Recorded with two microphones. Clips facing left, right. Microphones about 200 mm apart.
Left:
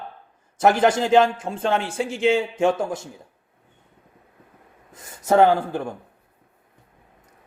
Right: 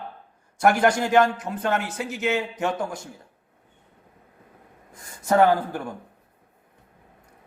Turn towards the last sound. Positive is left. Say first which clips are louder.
# left 2 dB
turn(degrees=25)  # may be behind; listen again after turning